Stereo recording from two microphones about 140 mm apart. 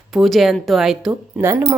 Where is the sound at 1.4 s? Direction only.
15° right (ahead or behind).